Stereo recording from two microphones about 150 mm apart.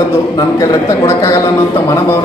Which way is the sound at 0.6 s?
20° left (ahead or behind).